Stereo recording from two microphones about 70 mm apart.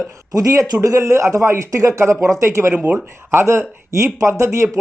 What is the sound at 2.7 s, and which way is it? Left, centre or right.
Speech, centre.